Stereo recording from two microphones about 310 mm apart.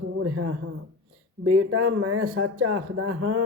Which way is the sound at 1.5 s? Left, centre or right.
Right.